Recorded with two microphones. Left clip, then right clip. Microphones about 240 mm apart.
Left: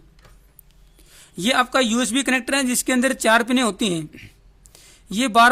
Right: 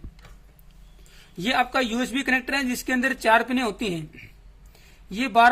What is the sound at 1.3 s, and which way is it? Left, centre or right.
Speech, left.